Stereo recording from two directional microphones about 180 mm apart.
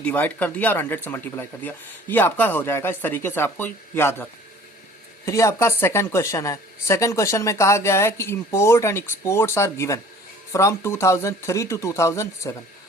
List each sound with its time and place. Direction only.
0.0 s a woman's voice: 10° left (ahead or behind)